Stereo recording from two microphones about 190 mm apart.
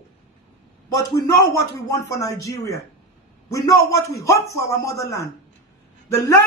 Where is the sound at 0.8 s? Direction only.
20° left (ahead or behind).